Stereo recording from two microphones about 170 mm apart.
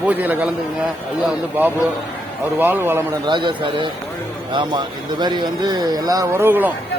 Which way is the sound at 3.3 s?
25° right (ahead or behind).